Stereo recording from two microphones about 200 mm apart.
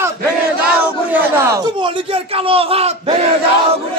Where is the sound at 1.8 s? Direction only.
25° right (ahead or behind).